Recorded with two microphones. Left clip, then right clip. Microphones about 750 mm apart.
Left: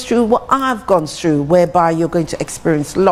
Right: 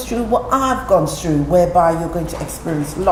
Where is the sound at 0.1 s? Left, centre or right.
Left.